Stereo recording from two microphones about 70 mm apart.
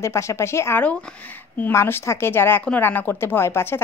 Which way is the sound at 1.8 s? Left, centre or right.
Left.